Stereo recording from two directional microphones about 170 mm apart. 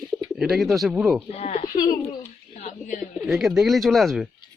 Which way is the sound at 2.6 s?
45° left (ahead or behind).